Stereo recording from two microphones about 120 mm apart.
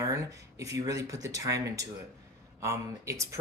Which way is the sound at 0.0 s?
25° right (ahead or behind).